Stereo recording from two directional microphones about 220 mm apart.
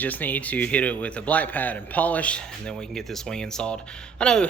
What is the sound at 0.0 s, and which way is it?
A man's voice, 10° left (ahead or behind).